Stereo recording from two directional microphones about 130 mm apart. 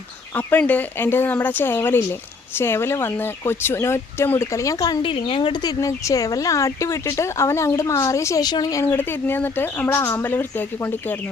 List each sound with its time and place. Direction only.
0.3 s speech: 10° left (ahead or behind)